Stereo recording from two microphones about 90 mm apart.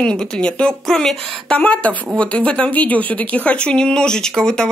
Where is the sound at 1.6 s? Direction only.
15° left (ahead or behind).